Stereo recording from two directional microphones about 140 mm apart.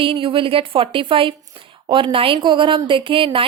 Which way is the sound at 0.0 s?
35° right (ahead or behind).